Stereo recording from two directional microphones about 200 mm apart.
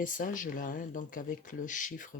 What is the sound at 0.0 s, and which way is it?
Speech, 40° left (ahead or behind).